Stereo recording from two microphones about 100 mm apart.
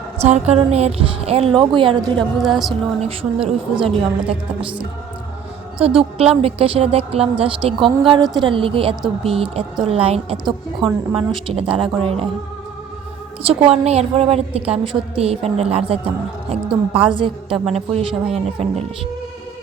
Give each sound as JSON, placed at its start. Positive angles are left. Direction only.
{"t": 0.2, "sound": "speech", "side_deg": -90}
{"t": 2.1, "sound": "speech", "side_deg": 0}
{"t": 3.0, "sound": "a woman's voice", "side_deg": -75}
{"t": 5.8, "sound": "a woman's voice", "side_deg": -75}
{"t": 10.3, "sound": "speech", "side_deg": -5}
{"t": 11.1, "sound": "a woman's voice", "side_deg": -60}
{"t": 11.8, "sound": "a woman's voice", "side_deg": -70}
{"t": 13.4, "sound": "speech", "side_deg": -85}
{"t": 15.2, "sound": "a woman's voice", "side_deg": -90}
{"t": 17.7, "sound": "speech", "side_deg": -75}